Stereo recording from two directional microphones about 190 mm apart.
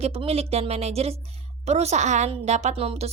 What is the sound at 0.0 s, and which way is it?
A woman's voice, 30° right (ahead or behind).